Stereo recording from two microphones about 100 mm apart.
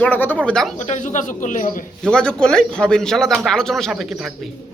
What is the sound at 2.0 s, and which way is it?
A man's voice, 10° left (ahead or behind).